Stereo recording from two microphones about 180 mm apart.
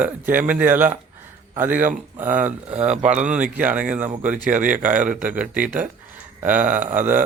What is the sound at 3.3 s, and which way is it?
Speech, 10° right (ahead or behind).